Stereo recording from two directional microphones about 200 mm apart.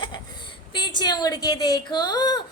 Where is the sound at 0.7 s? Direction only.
20° left (ahead or behind).